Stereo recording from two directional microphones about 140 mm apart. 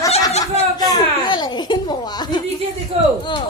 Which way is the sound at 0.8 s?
30° left (ahead or behind).